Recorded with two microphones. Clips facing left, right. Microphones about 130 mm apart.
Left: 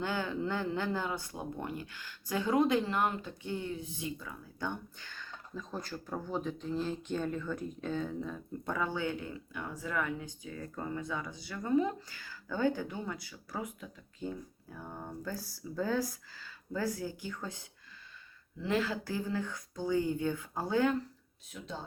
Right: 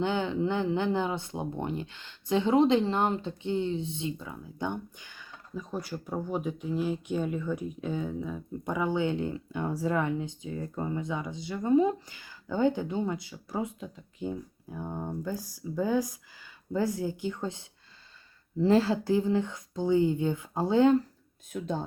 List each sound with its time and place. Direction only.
0.0 s a woman's voice: 20° right (ahead or behind)
19.1 s speech: 20° right (ahead or behind)
21.5 s speech: 55° right (ahead or behind)